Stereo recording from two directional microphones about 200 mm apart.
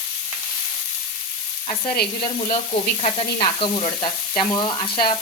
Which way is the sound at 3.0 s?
25° left (ahead or behind).